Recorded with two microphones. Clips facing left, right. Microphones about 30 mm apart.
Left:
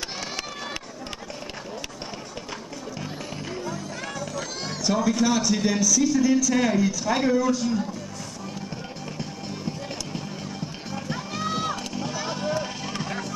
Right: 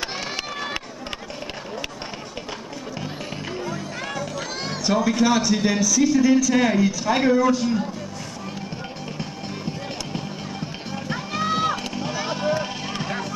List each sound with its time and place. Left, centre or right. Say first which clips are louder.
3.6 s speech: right 3 dB; centre
9.7 s music: right 2 dB; right